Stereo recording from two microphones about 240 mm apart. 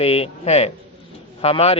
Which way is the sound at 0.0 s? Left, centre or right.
Left.